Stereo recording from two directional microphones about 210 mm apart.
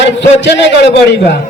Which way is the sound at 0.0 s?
55° left (ahead or behind).